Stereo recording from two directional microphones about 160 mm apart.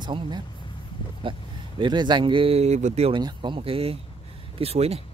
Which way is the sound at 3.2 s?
30° right (ahead or behind).